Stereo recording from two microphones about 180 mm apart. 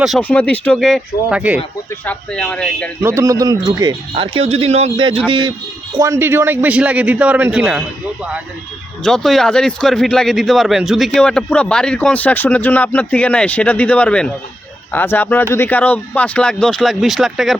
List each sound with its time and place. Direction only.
0.2 s speech: 10° left (ahead or behind)
2.0 s speech: 5° left (ahead or behind)
3.0 s a man's voice: 15° right (ahead or behind)